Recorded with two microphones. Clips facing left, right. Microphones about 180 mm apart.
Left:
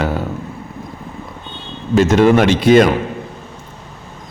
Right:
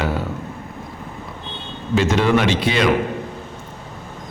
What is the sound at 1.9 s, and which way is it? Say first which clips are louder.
Speech: left 6 dB; 45° left (ahead or behind).